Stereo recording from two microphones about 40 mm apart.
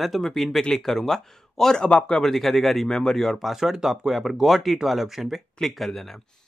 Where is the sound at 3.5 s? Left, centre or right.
Centre.